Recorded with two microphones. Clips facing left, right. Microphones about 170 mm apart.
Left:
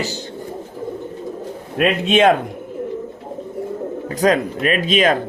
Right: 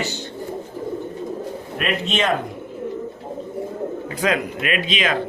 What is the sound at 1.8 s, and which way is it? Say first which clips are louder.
Speech: left 8 dB; 60° left (ahead or behind).